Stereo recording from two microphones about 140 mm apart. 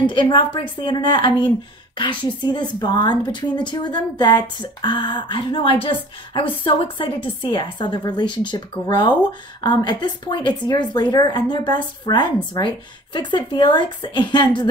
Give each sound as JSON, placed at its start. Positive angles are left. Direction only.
{"t": 0.0, "sound": "a woman's voice", "side_deg": 35}